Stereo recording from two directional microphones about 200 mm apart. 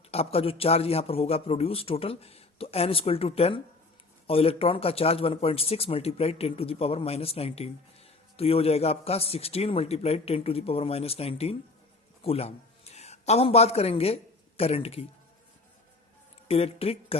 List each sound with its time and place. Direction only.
0.1 s a man's voice: 30° left (ahead or behind)
16.5 s a man's voice: 30° left (ahead or behind)